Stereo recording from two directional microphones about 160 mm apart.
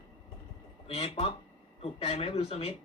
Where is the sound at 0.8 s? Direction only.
40° left (ahead or behind).